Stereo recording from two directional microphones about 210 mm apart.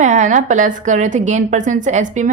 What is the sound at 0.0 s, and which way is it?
A woman's voice, 35° right (ahead or behind).